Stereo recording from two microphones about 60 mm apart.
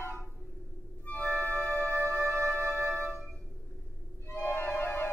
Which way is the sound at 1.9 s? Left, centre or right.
Right.